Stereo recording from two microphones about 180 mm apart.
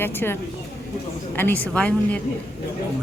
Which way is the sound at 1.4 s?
10° left (ahead or behind).